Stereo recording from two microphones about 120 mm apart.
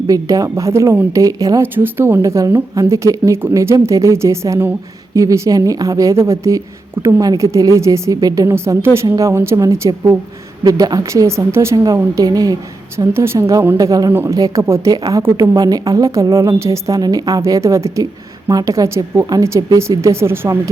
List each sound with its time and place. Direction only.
0.1 s speech: 25° right (ahead or behind)
10.6 s speech: 35° right (ahead or behind)
14.1 s speech: 15° right (ahead or behind)
14.3 s speech: 25° right (ahead or behind)